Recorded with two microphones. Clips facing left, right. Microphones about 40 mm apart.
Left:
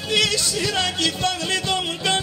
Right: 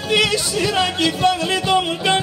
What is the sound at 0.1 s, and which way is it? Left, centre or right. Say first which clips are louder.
Speech: right 3 dB; centre.